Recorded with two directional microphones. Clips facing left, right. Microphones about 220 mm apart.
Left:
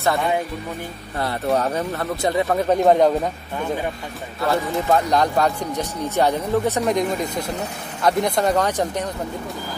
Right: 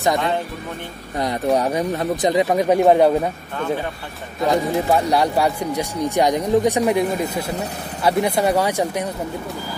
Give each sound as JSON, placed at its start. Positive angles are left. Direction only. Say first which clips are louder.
{"t": 1.1, "sound": "speech", "louder": "right 2 dB", "side_deg": -15}
{"t": 4.4, "sound": "speech", "louder": "right 3 dB", "side_deg": -15}